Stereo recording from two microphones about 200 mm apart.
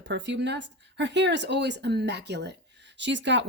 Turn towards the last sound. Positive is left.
turn(degrees=-65)  # may be behind; listen again after turning